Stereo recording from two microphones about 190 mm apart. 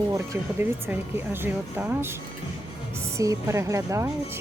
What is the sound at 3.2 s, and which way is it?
Speech, 15° right (ahead or behind).